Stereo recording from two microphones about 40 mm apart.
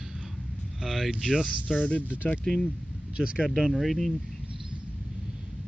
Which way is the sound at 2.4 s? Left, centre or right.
Centre.